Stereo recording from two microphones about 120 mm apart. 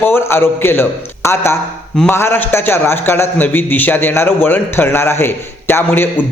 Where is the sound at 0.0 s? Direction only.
20° left (ahead or behind).